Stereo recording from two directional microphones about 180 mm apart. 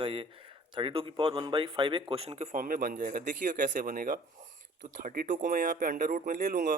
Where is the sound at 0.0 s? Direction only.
30° right (ahead or behind).